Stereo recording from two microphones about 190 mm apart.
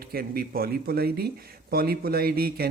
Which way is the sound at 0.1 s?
50° right (ahead or behind).